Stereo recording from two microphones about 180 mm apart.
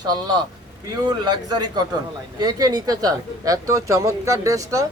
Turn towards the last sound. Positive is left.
turn(degrees=-20)  # may be behind; listen again after turning